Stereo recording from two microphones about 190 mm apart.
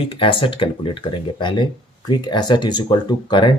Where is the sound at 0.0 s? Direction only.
30° left (ahead or behind).